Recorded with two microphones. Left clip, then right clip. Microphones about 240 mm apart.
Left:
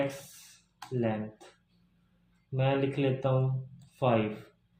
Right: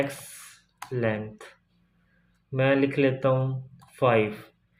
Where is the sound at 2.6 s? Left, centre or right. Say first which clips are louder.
Right 7 dB; right.